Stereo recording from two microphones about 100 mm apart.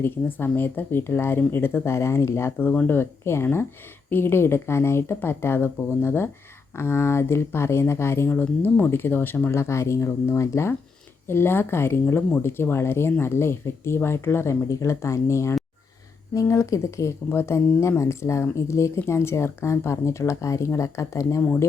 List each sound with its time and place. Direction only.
0.0 s speech: 20° left (ahead or behind)